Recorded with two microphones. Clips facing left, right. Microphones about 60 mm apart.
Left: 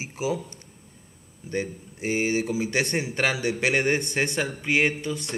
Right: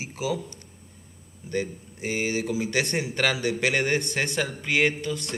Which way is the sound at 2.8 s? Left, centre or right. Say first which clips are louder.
Even; centre.